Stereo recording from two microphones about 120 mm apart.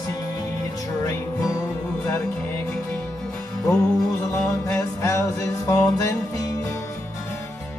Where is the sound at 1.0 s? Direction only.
30° left (ahead or behind).